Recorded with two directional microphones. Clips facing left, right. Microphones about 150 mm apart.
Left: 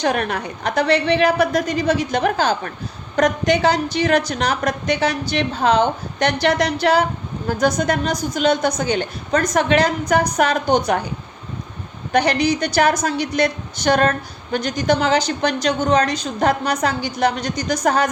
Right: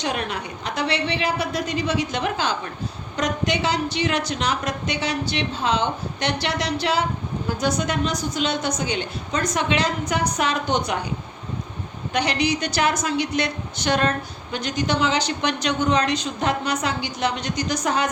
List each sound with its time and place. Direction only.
0.0 s a woman's voice: 50° left (ahead or behind)
12.1 s a woman's voice: 45° left (ahead or behind)